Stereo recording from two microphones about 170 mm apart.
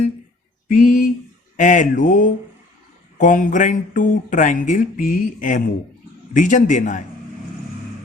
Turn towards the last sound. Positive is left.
turn(degrees=50)  # may be behind; listen again after turning